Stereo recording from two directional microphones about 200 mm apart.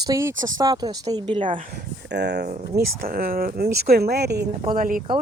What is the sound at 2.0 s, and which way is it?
Speech, 55° right (ahead or behind).